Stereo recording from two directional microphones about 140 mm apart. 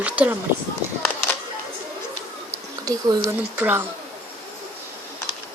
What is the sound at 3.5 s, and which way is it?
Speech, 15° right (ahead or behind).